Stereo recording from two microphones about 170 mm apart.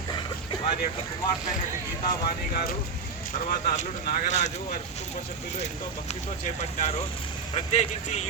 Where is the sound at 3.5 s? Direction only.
50° left (ahead or behind).